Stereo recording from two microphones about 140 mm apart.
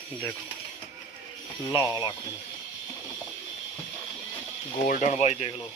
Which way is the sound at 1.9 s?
30° left (ahead or behind).